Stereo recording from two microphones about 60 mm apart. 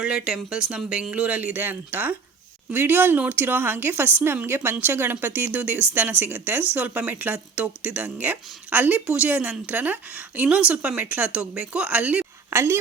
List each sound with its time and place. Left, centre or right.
1.1 s a woman's voice: right
10.9 s speech: right
11.3 s speech: centre
12.5 s a woman's voice: right